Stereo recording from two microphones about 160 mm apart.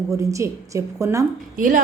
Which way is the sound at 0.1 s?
20° right (ahead or behind).